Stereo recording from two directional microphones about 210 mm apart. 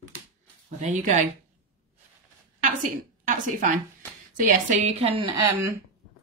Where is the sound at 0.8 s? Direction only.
35° right (ahead or behind).